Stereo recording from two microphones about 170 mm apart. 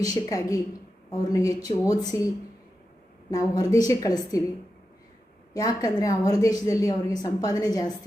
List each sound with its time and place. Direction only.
0.1 s a woman's voice: 20° left (ahead or behind)
3.2 s a woman's voice: 20° left (ahead or behind)
5.5 s a woman's voice: 20° left (ahead or behind)